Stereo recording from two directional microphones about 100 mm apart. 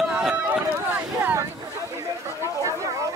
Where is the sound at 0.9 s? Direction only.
20° right (ahead or behind).